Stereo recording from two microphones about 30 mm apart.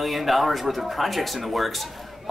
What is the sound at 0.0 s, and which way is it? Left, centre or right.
Speech, centre.